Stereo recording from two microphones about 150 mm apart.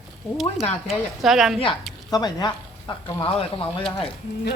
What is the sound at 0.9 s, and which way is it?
Speech, centre (ahead or behind).